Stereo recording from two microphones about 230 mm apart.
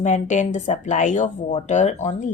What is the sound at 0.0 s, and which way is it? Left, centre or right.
Speech, left.